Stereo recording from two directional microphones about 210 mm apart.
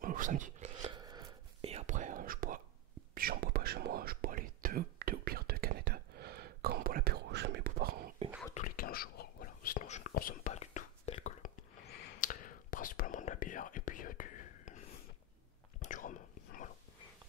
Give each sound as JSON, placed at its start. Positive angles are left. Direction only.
{"t": 0.0, "sound": "speech", "side_deg": -40}
{"t": 0.9, "sound": "whispering", "side_deg": -20}
{"t": 8.5, "sound": "whispering", "side_deg": 40}
{"t": 15.8, "sound": "whispering", "side_deg": 35}